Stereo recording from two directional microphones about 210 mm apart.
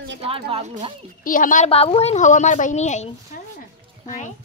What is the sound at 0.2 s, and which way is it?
Speech, 30° right (ahead or behind).